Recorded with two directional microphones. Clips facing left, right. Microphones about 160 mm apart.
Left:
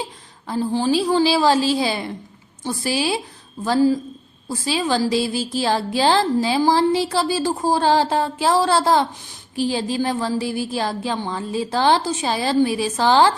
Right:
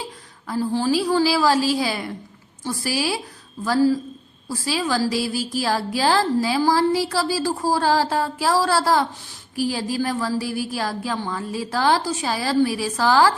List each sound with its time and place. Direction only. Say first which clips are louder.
0.4 s speech: left 1 dB; 20° left (ahead or behind)